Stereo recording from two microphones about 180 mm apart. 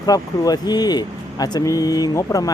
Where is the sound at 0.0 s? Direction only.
20° left (ahead or behind).